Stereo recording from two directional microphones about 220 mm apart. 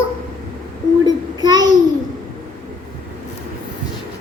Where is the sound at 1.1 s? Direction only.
20° right (ahead or behind).